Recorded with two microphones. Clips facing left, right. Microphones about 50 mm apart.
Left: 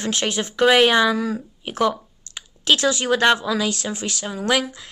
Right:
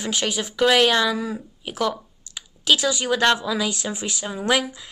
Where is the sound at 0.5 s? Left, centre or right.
Centre.